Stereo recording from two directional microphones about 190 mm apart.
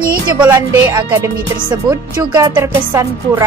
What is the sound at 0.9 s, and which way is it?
Speech, 20° right (ahead or behind).